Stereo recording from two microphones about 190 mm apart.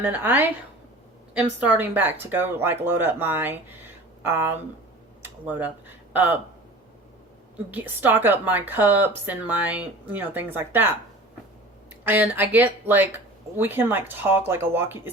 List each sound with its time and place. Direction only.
0.0 s speech: 10° right (ahead or behind)
7.7 s speech: 10° right (ahead or behind)
12.0 s speech: 10° right (ahead or behind)